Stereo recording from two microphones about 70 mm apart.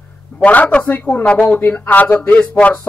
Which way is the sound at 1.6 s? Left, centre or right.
Left.